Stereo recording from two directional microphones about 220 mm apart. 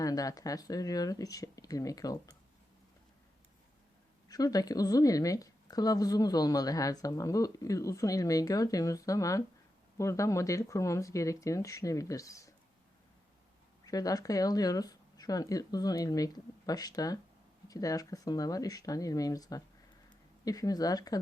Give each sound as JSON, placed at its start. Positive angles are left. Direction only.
{"t": 0.0, "sound": "a woman's voice", "side_deg": 15}
{"t": 4.3, "sound": "a woman's voice", "side_deg": 15}
{"t": 13.8, "sound": "a woman's voice", "side_deg": 15}